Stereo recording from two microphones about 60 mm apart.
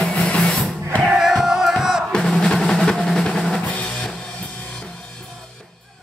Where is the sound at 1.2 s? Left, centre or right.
Centre.